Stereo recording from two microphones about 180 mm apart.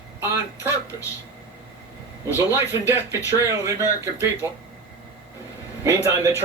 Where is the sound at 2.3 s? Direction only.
10° right (ahead or behind).